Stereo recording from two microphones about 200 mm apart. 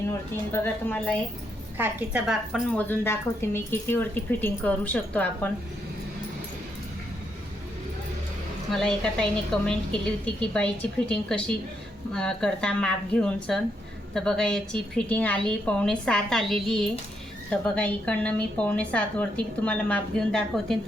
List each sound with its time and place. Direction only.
0.1 s a woman's voice: 10° left (ahead or behind)
1.8 s a woman's voice: 10° right (ahead or behind); by 5.5 s 10° left (ahead or behind)
8.7 s a woman's voice: 5° left (ahead or behind)